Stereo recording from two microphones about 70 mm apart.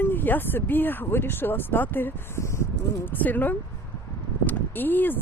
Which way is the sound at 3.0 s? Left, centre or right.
Left.